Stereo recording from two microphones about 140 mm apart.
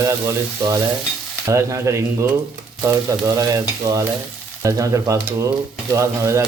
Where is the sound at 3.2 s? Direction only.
25° right (ahead or behind).